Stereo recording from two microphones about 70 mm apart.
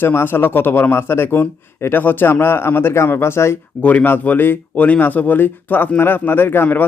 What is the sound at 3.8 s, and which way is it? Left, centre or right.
Speech, left.